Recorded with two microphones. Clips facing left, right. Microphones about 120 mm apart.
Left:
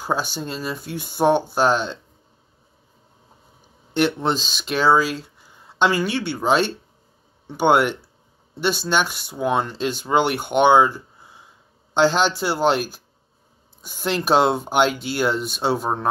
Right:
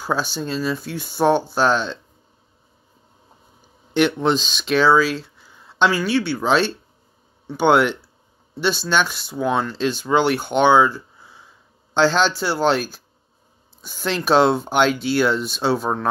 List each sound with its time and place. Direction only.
0.0 s speech: 15° left (ahead or behind)
3.9 s speech: 35° left (ahead or behind)
4.5 s speech: 10° left (ahead or behind)
5.9 s speech: 50° left (ahead or behind)
6.3 s speech: 15° left (ahead or behind)